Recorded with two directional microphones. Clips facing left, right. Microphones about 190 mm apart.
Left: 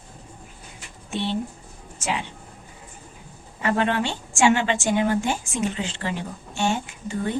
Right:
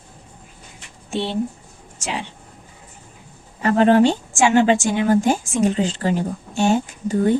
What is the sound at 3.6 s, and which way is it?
Speech, 40° right (ahead or behind).